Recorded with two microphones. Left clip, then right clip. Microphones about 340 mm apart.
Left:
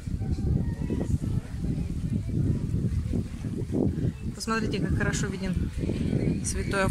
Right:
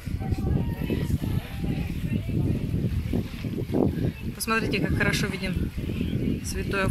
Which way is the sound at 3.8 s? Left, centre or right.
Right.